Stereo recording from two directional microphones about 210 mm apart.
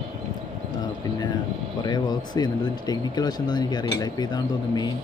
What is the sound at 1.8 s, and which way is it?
Speech, 20° left (ahead or behind).